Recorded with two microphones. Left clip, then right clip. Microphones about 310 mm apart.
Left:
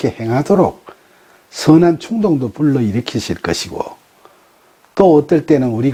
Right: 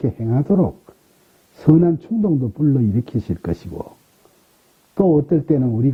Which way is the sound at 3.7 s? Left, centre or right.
Left.